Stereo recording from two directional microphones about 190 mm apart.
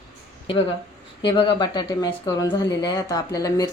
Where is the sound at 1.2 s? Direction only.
25° left (ahead or behind).